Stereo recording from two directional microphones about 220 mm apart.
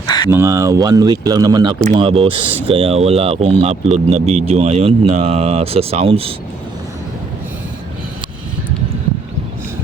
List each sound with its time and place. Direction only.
0.3 s speech: 10° right (ahead or behind)